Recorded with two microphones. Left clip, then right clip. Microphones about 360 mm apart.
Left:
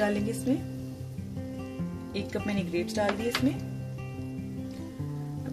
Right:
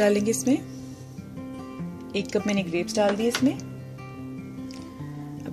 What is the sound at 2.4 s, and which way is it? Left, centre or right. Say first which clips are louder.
Speech: right 4 dB; centre.